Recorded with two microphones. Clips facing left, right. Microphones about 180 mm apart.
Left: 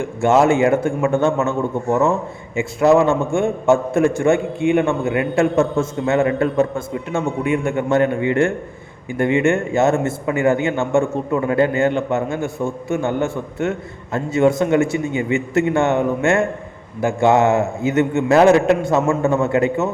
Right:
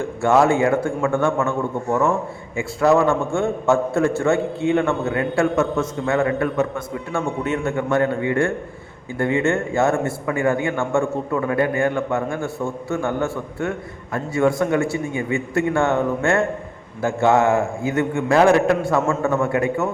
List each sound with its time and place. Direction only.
0.2 s a man's voice: 20° left (ahead or behind)
7.4 s a man's voice: 10° left (ahead or behind)
7.8 s a man's voice: 25° left (ahead or behind)